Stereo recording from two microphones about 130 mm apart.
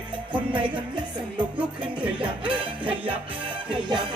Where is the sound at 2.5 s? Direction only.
40° right (ahead or behind).